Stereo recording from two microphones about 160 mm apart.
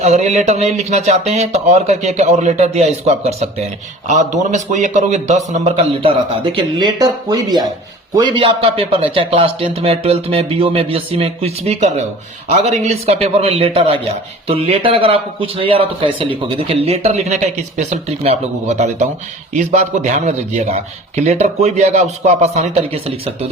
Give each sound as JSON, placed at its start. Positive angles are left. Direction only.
{"t": 0.0, "sound": "a man's voice", "side_deg": -45}